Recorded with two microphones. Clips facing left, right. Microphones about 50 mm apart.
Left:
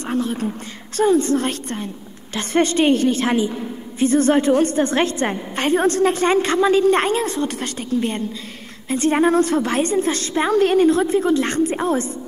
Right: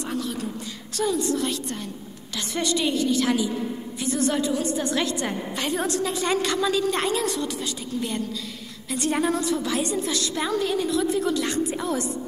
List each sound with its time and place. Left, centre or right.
0.0 s a woman's voice: left
7.4 s a woman's voice: left